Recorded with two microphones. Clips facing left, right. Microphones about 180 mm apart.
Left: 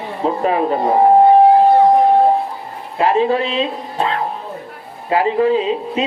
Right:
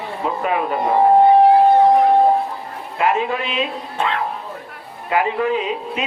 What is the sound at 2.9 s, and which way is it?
Speech, 30° left (ahead or behind).